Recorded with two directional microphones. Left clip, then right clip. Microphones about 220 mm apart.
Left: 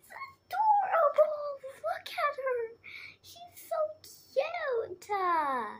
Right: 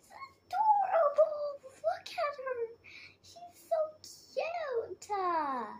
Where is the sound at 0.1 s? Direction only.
Centre (ahead or behind).